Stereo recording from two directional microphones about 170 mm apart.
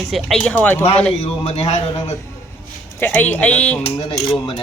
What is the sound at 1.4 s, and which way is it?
Speech, 35° left (ahead or behind).